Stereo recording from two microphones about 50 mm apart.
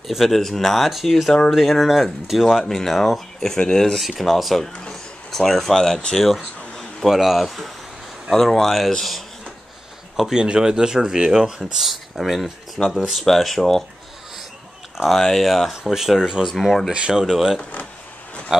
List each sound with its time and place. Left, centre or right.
0.1 s speech: centre
4.0 s speech: centre
7.0 s speech: centre
10.3 s speech: centre
15.0 s speech: centre
15.7 s speech: centre
16.9 s speech: centre
17.2 s speech: centre